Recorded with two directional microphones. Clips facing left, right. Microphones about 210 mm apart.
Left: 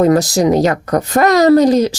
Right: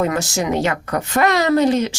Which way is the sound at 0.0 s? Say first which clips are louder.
Left 9 dB; 35° left (ahead or behind).